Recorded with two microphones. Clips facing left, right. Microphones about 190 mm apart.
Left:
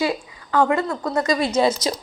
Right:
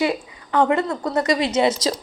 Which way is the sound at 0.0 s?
20° right (ahead or behind).